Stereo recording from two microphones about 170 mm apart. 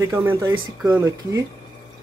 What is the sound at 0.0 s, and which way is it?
Speech, 15° right (ahead or behind).